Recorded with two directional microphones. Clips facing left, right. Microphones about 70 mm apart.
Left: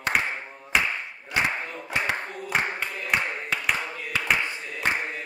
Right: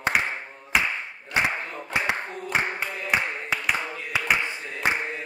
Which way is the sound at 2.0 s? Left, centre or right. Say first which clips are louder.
Right 1 dB; centre.